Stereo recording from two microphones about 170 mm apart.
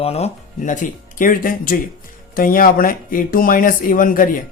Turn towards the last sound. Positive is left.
turn(degrees=55)  # may be behind; listen again after turning